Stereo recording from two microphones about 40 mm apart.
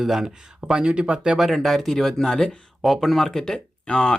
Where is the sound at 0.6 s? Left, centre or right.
Right.